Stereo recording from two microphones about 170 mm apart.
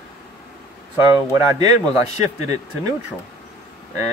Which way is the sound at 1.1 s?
20° right (ahead or behind).